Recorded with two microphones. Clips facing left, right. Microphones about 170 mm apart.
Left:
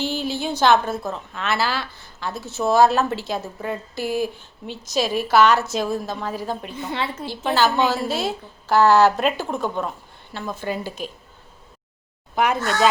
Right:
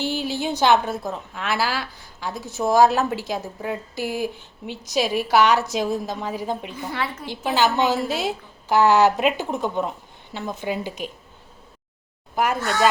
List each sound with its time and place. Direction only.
0.0 s a woman's voice: 15° right (ahead or behind)
6.7 s a woman's voice: 25° left (ahead or behind)
7.3 s a woman's voice: 15° right (ahead or behind)
12.4 s speech: 5° right (ahead or behind)